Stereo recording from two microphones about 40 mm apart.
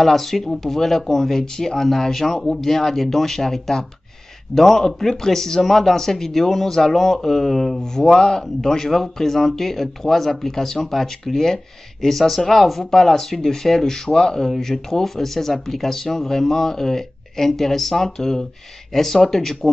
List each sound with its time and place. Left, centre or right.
0.0 s speech: centre